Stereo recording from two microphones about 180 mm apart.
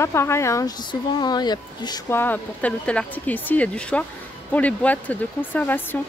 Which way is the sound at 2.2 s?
10° left (ahead or behind).